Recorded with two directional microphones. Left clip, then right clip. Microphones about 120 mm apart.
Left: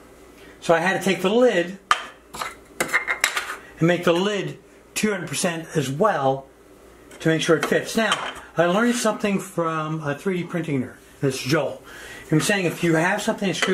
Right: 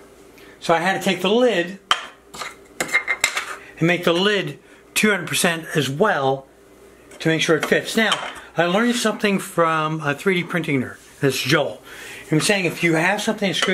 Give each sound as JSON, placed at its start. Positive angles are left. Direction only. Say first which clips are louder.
{"t": 0.7, "sound": "speech", "louder": "right 1 dB", "side_deg": -15}
{"t": 1.9, "sound": "a sound", "louder": "even", "side_deg": 5}
{"t": 3.8, "sound": "speech", "louder": "right 2 dB", "side_deg": -15}
{"t": 4.9, "sound": "speech", "louder": "right 6 dB", "side_deg": -40}
{"t": 9.6, "sound": "speech", "louder": "right 8 dB", "side_deg": -35}
{"t": 12.3, "sound": "speech", "louder": "right 2 dB", "side_deg": -15}